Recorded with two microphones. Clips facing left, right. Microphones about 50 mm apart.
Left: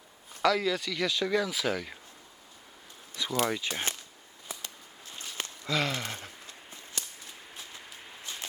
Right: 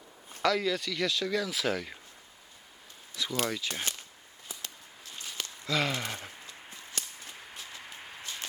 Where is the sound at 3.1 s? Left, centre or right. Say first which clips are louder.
Left 3 dB; centre.